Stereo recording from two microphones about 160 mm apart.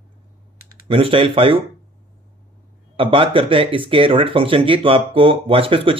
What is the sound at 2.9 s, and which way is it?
Speech, 35° right (ahead or behind).